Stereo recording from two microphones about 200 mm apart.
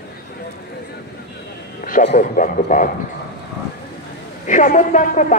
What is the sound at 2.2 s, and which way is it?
Speech, 40° left (ahead or behind).